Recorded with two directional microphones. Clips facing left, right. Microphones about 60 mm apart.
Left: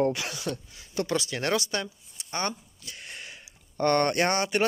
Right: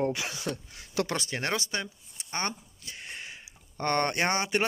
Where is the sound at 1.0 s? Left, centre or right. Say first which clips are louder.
Right 1 dB; right.